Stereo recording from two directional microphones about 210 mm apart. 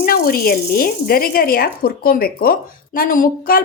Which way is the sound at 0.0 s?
45° left (ahead or behind).